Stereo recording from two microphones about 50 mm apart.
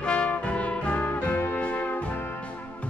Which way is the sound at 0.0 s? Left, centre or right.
Left.